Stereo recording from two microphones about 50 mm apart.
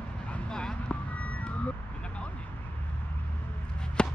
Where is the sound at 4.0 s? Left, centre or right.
Centre.